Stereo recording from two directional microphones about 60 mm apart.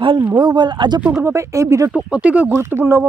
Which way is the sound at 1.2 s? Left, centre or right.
Right.